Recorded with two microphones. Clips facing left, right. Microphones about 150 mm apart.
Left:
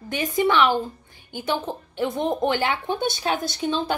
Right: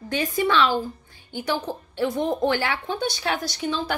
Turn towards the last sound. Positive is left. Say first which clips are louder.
# left 2 dB
turn(degrees=20)  # may be behind; listen again after turning